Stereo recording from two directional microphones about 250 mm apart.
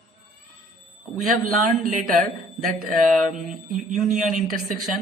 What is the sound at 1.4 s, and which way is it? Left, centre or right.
Speech, right.